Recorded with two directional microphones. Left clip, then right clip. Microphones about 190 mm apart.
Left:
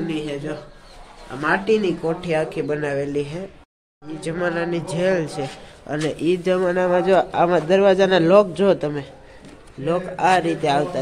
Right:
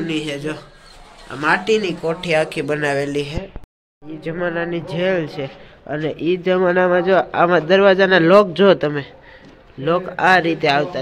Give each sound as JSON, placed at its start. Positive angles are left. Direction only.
{"t": 0.0, "sound": "a man's voice", "side_deg": -15}